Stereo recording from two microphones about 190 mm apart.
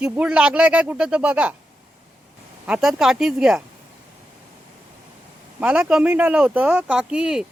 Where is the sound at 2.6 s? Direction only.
5° right (ahead or behind).